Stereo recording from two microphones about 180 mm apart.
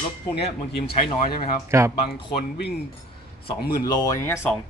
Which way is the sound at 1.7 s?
15° right (ahead or behind).